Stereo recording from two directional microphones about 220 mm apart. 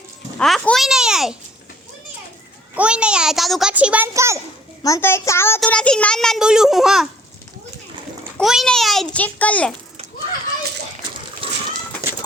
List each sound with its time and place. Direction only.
0.3 s a child's voice: 5° left (ahead or behind)
2.7 s a child's voice: 5° right (ahead or behind)
4.8 s a child's voice: 10° left (ahead or behind)
8.4 s a child's voice: centre (ahead or behind)
11.4 s a sound: 25° right (ahead or behind)